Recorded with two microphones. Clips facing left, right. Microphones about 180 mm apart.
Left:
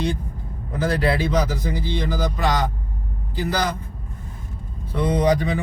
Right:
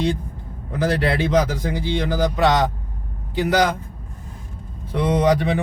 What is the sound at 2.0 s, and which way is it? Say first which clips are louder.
Speech: right 7 dB; 80° right.